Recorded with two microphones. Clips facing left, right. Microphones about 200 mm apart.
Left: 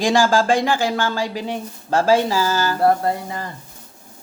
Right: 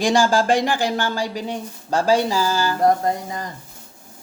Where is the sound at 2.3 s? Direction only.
45° left (ahead or behind).